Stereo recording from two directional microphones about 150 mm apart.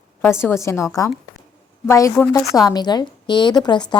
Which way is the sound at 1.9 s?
20° left (ahead or behind).